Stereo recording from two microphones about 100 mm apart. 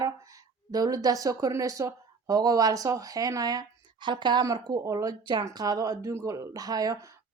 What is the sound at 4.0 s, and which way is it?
A woman's voice, 50° right (ahead or behind).